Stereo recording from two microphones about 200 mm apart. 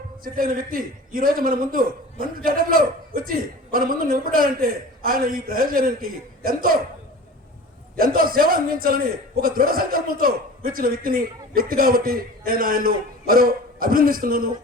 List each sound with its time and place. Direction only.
0.3 s a man's voice: 45° right (ahead or behind)
7.9 s a man's voice: 45° right (ahead or behind)